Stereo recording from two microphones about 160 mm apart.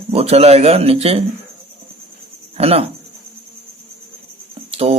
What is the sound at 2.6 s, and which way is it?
Speech, 40° right (ahead or behind).